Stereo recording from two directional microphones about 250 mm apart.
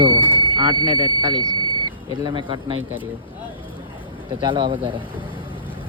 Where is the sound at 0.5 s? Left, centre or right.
Centre.